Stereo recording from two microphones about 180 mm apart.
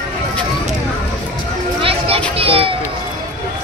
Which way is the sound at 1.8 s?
30° right (ahead or behind).